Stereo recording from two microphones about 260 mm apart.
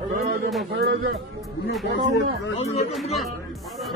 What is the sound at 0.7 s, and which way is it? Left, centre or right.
Speech, right.